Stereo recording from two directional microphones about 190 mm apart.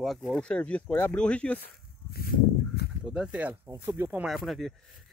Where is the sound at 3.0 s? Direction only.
5° right (ahead or behind).